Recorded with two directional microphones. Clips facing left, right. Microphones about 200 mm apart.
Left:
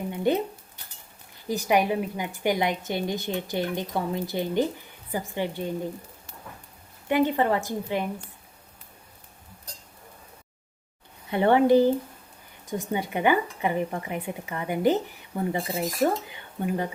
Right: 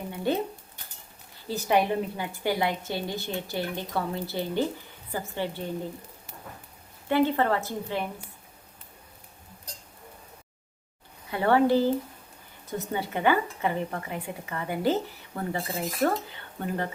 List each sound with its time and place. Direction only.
0.1 s a sound: 15° left (ahead or behind)
1.5 s a woman's voice: 15° left (ahead or behind)
7.1 s a woman's voice: 15° left (ahead or behind)
11.3 s a woman's voice: 20° left (ahead or behind)